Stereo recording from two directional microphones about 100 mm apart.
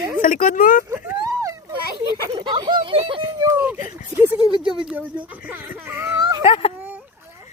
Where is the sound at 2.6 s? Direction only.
55° right (ahead or behind).